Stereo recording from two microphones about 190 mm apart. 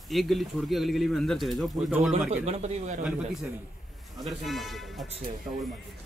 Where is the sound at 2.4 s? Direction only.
35° right (ahead or behind).